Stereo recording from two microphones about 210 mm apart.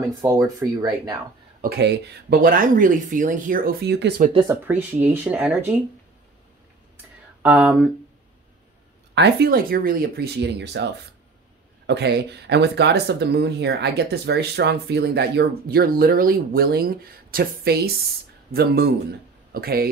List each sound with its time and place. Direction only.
0.2 s speech: 15° right (ahead or behind)
1.6 s speech: 55° right (ahead or behind)
4.5 s speech: 10° right (ahead or behind)
7.4 s speech: 5° right (ahead or behind)
9.1 s speech: 50° right (ahead or behind)